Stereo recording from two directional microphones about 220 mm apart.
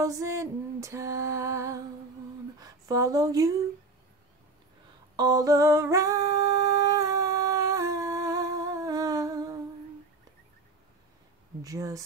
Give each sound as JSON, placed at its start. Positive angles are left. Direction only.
{"t": 0.0, "sound": "music", "side_deg": -15}
{"t": 2.6, "sound": "speech", "side_deg": -15}
{"t": 5.1, "sound": "singing", "side_deg": -15}
{"t": 11.6, "sound": "speech", "side_deg": -15}